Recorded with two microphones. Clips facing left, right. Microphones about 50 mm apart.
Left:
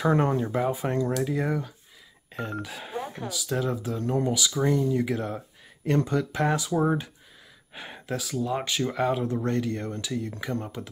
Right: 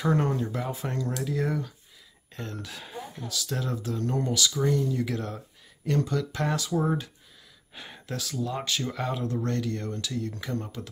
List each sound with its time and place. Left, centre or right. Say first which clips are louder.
0.0 s speech: left 3 dB; left
3.0 s a sound: left 5 dB; left
3.3 s speech: left 3 dB; centre